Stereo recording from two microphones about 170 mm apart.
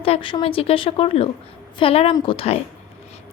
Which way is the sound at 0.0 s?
30° left (ahead or behind).